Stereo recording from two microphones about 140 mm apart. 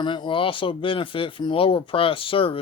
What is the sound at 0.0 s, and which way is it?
Speech, 35° left (ahead or behind).